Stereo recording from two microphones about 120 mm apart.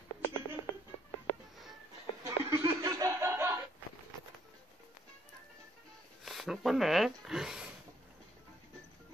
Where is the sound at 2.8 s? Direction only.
25° right (ahead or behind).